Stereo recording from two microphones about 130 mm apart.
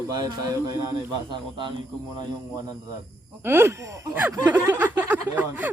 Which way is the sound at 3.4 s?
20° right (ahead or behind).